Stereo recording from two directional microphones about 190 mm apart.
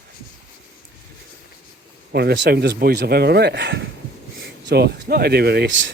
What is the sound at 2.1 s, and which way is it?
Speech, 60° right (ahead or behind).